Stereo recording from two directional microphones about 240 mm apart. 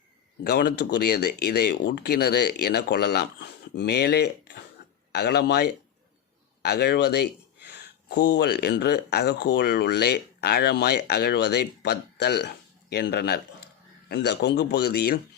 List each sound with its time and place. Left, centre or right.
0.4 s speech: left